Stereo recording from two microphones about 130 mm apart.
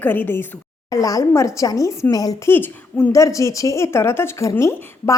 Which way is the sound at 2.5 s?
15° left (ahead or behind).